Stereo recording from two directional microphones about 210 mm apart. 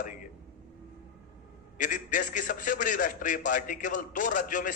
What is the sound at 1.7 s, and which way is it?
A man's voice, 40° left (ahead or behind).